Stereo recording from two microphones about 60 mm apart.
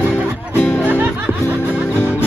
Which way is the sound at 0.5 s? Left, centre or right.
Left.